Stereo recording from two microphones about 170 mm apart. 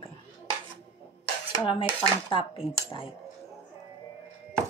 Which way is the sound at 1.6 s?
30° left (ahead or behind).